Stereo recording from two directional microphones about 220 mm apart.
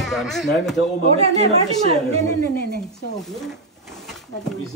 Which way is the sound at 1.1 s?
25° right (ahead or behind).